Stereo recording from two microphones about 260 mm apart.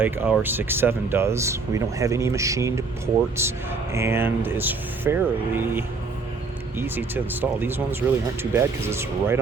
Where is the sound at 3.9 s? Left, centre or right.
Centre.